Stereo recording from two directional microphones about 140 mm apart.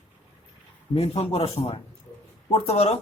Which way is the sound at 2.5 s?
45° left (ahead or behind).